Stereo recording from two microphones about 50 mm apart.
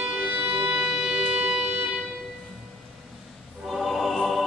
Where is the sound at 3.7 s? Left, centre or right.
Centre.